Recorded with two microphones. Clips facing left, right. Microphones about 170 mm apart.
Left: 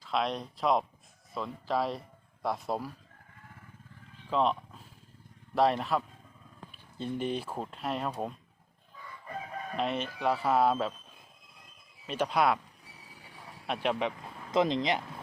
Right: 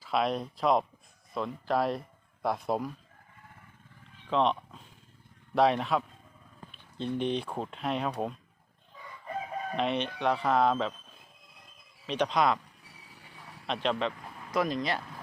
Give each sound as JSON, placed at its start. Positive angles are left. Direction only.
{"t": 0.0, "sound": "speech", "side_deg": 0}
{"t": 4.3, "sound": "a sound", "side_deg": 5}
{"t": 5.5, "sound": "speech", "side_deg": 0}
{"t": 9.7, "sound": "speech", "side_deg": 0}
{"t": 12.0, "sound": "speech", "side_deg": 5}
{"t": 13.7, "sound": "speech", "side_deg": 10}
{"t": 14.5, "sound": "speech", "side_deg": 25}